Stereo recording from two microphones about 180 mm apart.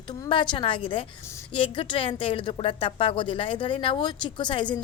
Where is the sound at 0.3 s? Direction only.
25° left (ahead or behind).